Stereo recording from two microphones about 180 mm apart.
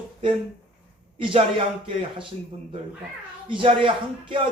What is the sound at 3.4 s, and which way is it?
Speech, 30° right (ahead or behind).